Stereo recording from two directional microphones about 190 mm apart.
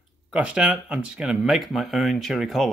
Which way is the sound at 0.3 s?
5° right (ahead or behind).